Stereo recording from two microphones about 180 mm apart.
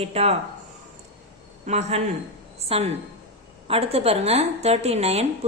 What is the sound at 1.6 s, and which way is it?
A man's voice, 40° right (ahead or behind).